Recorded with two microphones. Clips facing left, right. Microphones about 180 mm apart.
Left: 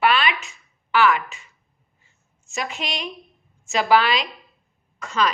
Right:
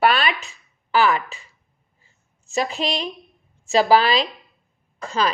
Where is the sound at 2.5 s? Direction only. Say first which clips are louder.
Right 6 dB; 35° right (ahead or behind).